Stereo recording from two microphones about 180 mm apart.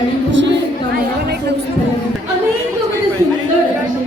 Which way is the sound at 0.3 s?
80° right.